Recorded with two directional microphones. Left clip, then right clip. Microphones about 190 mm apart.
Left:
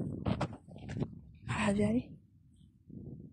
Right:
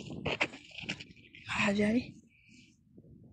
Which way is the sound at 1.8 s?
Centre (ahead or behind).